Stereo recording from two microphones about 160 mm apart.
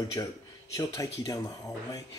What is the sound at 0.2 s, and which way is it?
Speech, 25° left (ahead or behind).